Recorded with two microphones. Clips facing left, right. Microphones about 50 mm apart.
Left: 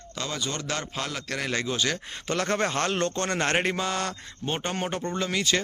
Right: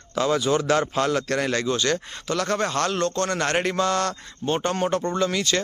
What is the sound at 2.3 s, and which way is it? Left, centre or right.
A man's voice, left.